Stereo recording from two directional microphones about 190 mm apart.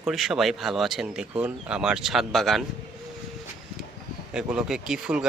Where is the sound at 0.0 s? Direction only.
Centre (ahead or behind).